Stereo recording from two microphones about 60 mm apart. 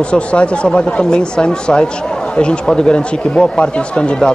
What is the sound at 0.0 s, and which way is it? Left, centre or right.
Speech, centre.